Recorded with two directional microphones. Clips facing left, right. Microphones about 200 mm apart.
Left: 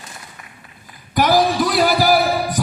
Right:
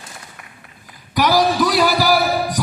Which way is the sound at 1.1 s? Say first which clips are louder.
Left 1 dB; 50° left (ahead or behind).